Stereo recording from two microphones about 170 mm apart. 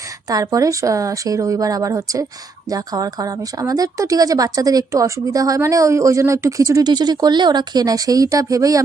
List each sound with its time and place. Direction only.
0.3 s speech: 20° right (ahead or behind)